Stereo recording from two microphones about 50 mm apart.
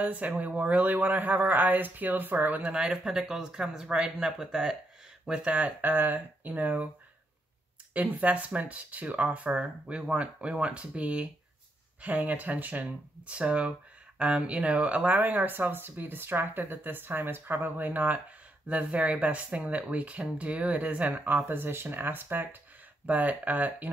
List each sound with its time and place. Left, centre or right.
0.0 s speech: right
2.6 s speech: centre
5.3 s speech: right
5.8 s speech: right
7.9 s speech: right
21.5 s speech: right
23.0 s speech: right